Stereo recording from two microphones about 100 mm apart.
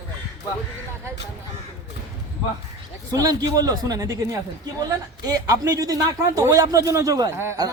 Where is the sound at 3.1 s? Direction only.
40° right (ahead or behind).